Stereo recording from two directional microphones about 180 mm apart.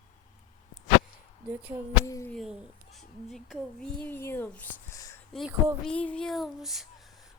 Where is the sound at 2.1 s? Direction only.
15° left (ahead or behind).